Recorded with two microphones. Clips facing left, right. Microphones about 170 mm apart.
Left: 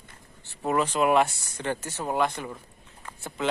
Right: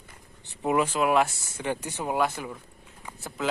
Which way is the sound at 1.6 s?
15° right (ahead or behind).